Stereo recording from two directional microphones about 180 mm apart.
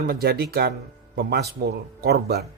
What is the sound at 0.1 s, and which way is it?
Speech, 60° right (ahead or behind).